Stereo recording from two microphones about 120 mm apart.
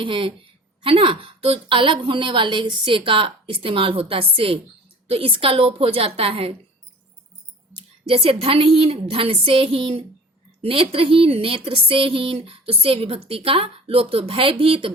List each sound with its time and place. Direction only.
0.0 s a woman's voice: 45° right (ahead or behind)
8.0 s a woman's voice: 55° right (ahead or behind)